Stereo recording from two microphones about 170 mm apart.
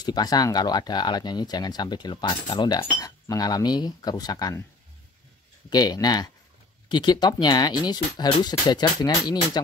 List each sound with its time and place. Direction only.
0.0 s speech: 25° left (ahead or behind)
5.7 s speech: 25° left (ahead or behind)